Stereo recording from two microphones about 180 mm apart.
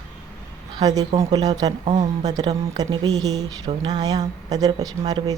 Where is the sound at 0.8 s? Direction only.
20° right (ahead or behind).